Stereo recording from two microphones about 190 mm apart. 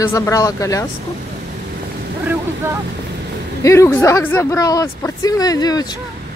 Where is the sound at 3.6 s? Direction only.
15° left (ahead or behind).